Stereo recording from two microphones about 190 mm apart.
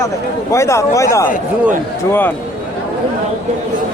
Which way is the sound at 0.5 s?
15° left (ahead or behind).